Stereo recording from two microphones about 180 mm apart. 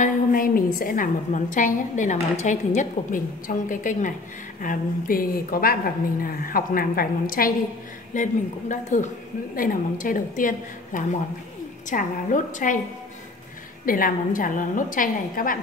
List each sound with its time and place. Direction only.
0.0 s a woman's voice: 50° left (ahead or behind)
13.8 s a woman's voice: 50° left (ahead or behind)